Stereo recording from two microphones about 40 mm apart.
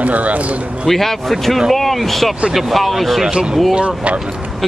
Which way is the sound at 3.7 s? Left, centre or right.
Right.